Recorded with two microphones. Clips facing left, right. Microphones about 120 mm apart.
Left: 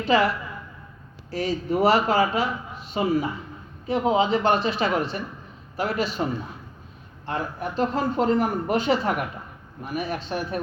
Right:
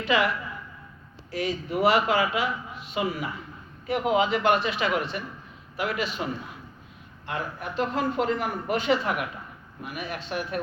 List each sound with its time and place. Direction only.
0.0 s speech: 35° left (ahead or behind)
1.3 s speech: 35° left (ahead or behind)